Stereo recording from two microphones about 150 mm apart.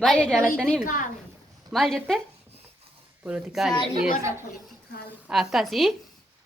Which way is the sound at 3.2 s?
5° right (ahead or behind).